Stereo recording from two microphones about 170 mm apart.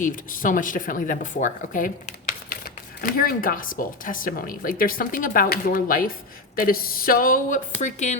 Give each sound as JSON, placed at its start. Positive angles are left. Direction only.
{"t": 0.0, "sound": "speech", "side_deg": 50}
{"t": 7.8, "sound": "speech", "side_deg": 45}